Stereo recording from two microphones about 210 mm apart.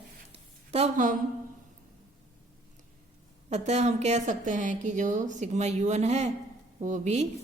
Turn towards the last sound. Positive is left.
turn(degrees=-35)  # may be behind; listen again after turning